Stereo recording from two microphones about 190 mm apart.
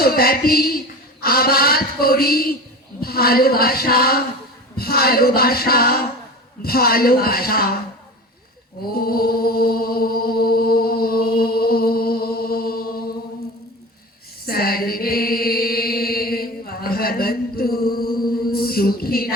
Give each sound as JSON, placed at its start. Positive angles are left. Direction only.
{"t": 0.0, "sound": "speech", "side_deg": 55}
{"t": 8.9, "sound": "chant", "side_deg": 50}
{"t": 14.4, "sound": "mantra", "side_deg": 50}